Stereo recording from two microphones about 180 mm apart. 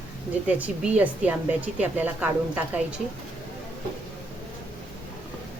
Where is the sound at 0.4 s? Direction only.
10° right (ahead or behind).